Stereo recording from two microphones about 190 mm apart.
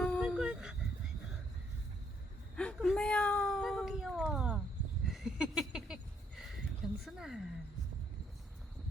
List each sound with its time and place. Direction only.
0.0 s dog: centre (ahead or behind)
2.6 s cat: 5° left (ahead or behind)
5.1 s a sound: centre (ahead or behind)